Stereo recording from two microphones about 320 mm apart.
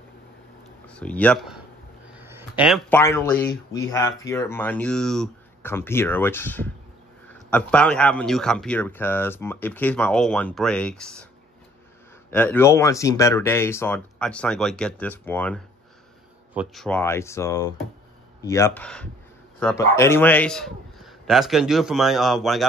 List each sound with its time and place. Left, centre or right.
0.8 s speech: centre
2.1 s a sound: centre
3.0 s speech: centre
12.3 s speech: centre